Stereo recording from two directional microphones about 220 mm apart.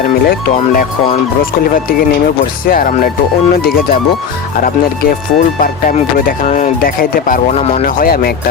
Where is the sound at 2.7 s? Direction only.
40° left (ahead or behind).